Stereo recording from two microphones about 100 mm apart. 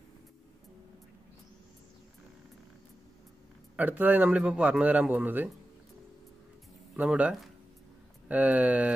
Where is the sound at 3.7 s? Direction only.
15° right (ahead or behind).